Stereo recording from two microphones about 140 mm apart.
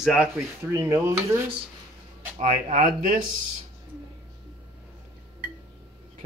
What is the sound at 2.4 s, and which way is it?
Speech, 60° right (ahead or behind).